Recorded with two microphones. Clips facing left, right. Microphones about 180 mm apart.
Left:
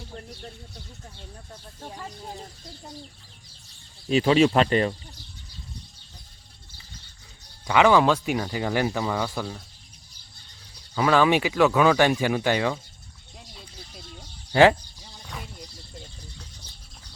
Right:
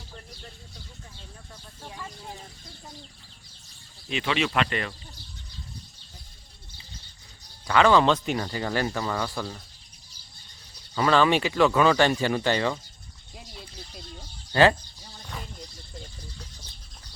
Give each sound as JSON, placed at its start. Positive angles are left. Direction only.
{"t": 1.8, "sound": "speech", "side_deg": 40}
{"t": 4.1, "sound": "speech", "side_deg": 35}
{"t": 7.7, "sound": "speech", "side_deg": 15}
{"t": 10.9, "sound": "speech", "side_deg": 10}
{"t": 13.4, "sound": "a sound", "side_deg": 0}
{"t": 14.5, "sound": "speech", "side_deg": 10}
{"t": 15.2, "sound": "a sound", "side_deg": 0}